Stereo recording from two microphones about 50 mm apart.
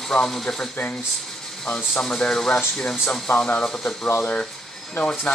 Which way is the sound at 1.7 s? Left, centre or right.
Centre.